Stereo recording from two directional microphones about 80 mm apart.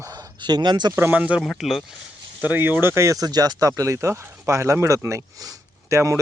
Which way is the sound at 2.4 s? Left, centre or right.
Right.